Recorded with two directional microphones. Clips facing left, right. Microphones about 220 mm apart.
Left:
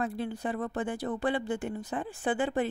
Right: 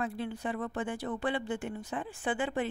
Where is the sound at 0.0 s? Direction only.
40° left (ahead or behind).